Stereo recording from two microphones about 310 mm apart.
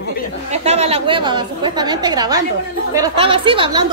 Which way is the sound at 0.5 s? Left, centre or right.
Right.